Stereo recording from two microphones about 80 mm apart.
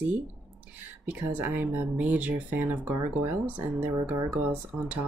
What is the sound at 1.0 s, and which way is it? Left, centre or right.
Speech, right.